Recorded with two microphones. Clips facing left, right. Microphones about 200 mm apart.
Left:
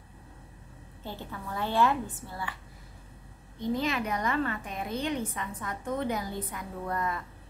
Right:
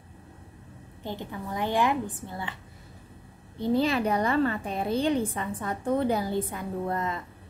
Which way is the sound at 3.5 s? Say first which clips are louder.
Right 5 dB; 30° right (ahead or behind).